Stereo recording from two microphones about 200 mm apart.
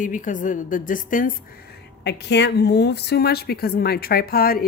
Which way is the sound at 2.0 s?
60° left (ahead or behind).